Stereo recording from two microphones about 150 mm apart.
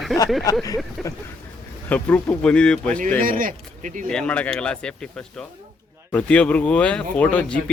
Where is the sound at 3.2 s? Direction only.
65° right (ahead or behind).